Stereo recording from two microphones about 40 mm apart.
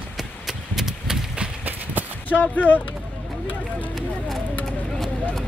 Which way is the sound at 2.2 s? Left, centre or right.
Left.